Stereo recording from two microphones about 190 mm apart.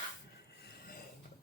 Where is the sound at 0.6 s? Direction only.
50° left (ahead or behind).